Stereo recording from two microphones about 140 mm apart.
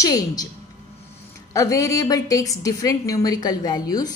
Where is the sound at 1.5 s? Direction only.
25° left (ahead or behind).